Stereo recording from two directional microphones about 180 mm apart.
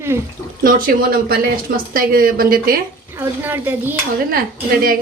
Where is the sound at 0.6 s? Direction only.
50° right (ahead or behind).